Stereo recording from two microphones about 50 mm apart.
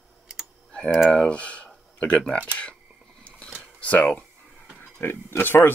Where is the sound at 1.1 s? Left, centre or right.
Left.